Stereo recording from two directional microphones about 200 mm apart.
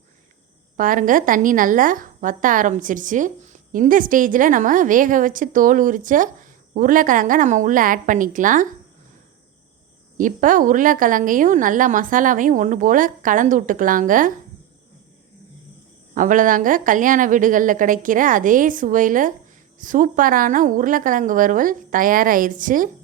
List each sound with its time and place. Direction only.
0.8 s a woman's voice: 40° right (ahead or behind)
10.2 s a woman's voice: 40° right (ahead or behind)
16.1 s a woman's voice: 40° right (ahead or behind)